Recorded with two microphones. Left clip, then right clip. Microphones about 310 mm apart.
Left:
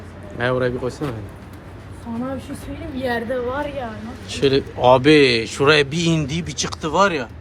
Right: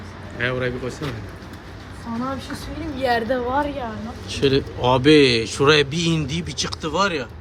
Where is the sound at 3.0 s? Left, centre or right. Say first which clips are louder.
Right 2 dB; centre.